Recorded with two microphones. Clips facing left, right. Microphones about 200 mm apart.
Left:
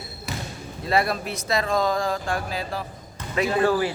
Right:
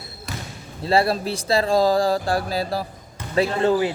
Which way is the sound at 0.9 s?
30° right (ahead or behind).